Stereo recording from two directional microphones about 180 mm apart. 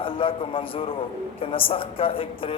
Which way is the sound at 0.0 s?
30° left (ahead or behind).